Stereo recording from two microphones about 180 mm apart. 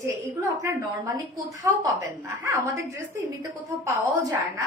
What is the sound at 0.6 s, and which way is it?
A woman's voice, 15° right (ahead or behind).